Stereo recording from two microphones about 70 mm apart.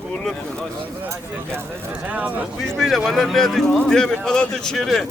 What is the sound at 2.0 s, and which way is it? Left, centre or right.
Speech, right.